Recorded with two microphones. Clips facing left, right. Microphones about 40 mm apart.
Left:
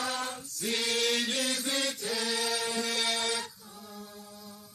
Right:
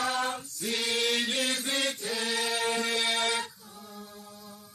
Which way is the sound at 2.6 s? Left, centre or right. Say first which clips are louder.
Right 3 dB; right.